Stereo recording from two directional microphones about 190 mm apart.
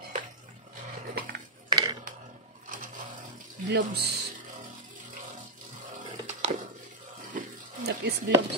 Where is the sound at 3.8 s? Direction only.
60° right (ahead or behind).